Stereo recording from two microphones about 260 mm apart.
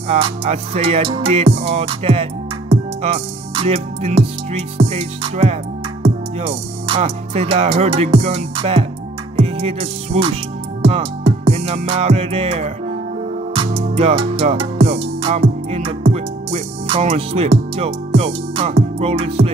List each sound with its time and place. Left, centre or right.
0.1 s music: right